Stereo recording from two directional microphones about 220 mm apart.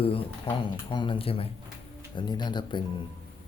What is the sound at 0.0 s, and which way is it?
Speech, 25° left (ahead or behind).